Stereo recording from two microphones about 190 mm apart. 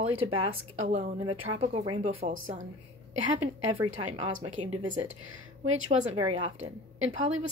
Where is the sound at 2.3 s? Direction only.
40° right (ahead or behind).